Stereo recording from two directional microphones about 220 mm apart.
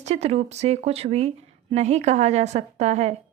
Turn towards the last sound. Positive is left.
turn(degrees=-30)  # may be behind; listen again after turning